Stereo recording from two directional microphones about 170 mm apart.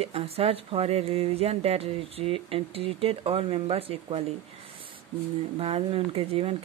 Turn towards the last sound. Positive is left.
turn(degrees=-35)  # may be behind; listen again after turning